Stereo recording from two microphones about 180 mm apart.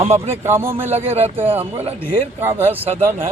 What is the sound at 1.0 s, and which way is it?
Speech, 35° right (ahead or behind).